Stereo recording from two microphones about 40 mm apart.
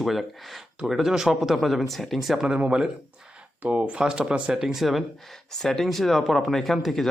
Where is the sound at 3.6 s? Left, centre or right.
Right.